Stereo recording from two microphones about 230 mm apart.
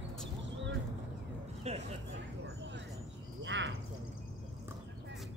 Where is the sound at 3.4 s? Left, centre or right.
Right.